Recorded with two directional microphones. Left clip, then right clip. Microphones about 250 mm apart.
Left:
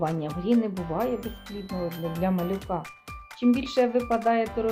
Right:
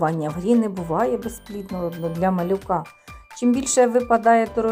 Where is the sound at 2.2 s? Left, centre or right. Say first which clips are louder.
Right 8 dB; right.